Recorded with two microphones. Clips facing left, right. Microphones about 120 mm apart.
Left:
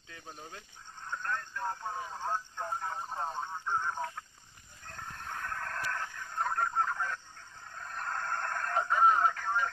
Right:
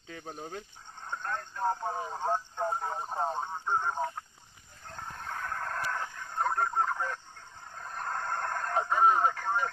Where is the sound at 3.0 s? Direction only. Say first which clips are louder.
Right 4 dB; 30° right (ahead or behind).